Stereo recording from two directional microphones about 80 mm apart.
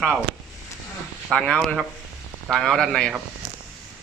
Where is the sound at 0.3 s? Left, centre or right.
Centre.